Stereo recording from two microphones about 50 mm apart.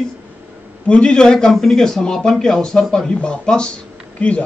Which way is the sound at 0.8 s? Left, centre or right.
Centre.